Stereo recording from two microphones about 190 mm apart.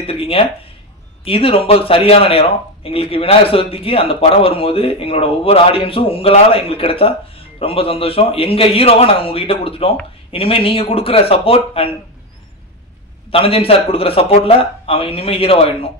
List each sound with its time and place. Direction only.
0.0 s speech: 30° left (ahead or behind)
13.3 s speech: 30° left (ahead or behind)